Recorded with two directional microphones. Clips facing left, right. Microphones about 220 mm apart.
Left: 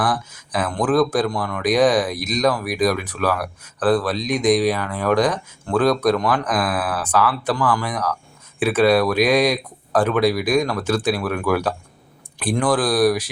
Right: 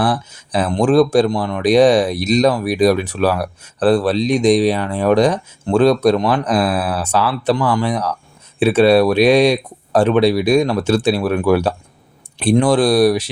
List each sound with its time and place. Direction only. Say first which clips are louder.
0.0 s speech: right 4 dB; 30° right (ahead or behind)